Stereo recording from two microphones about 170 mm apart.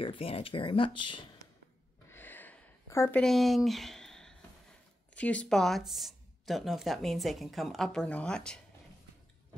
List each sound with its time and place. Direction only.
0.0 s speech: 35° left (ahead or behind)
2.0 s a sound: 10° left (ahead or behind)
3.2 s speech: centre (ahead or behind)